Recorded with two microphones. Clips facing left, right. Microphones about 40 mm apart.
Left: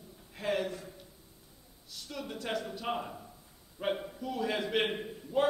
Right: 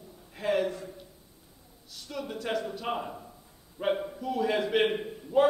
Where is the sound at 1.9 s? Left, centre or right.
Centre.